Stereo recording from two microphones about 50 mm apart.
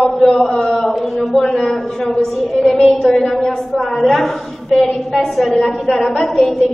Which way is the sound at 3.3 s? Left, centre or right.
Centre.